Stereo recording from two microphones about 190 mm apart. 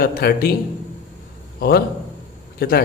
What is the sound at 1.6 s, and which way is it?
Speech, 55° left (ahead or behind).